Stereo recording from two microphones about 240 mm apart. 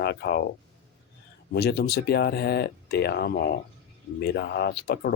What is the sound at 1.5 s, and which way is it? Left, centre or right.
Speech, left.